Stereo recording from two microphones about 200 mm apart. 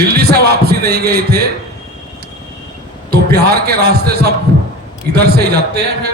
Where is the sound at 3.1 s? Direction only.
50° right (ahead or behind).